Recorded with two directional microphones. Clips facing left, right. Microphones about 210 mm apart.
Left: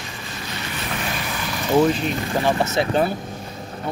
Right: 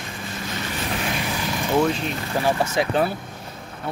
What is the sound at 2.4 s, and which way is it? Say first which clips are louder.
Speech: even; 10° right (ahead or behind).